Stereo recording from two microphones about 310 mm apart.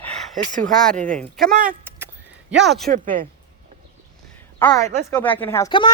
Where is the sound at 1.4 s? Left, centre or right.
Right.